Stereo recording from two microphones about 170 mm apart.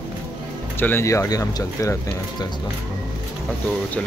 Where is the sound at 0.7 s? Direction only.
15° left (ahead or behind).